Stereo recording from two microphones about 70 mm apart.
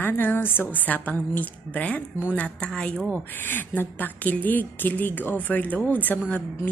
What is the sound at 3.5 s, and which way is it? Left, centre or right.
A woman's voice, left.